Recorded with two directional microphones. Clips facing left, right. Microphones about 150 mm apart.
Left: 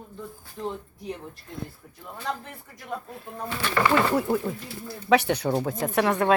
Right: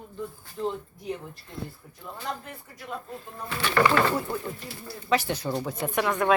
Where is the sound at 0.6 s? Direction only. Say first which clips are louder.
Right 2 dB; 5° left (ahead or behind).